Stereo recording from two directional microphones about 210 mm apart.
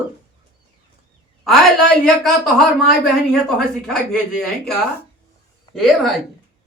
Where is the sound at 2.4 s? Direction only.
Centre (ahead or behind).